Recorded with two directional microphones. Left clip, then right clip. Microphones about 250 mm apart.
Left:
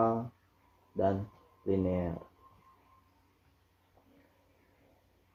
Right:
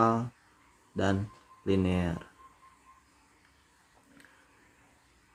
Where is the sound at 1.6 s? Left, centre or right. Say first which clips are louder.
Right 2 dB; right.